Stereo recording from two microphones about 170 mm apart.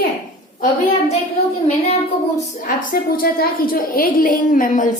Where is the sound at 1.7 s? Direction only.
40° left (ahead or behind).